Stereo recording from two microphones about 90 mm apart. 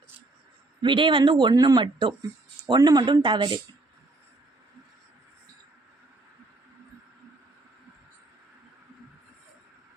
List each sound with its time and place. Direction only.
0.8 s speech: 65° right (ahead or behind)
1.5 s speech: 45° right (ahead or behind)
1.8 s speech: 65° right (ahead or behind)
2.6 s speech: 50° right (ahead or behind)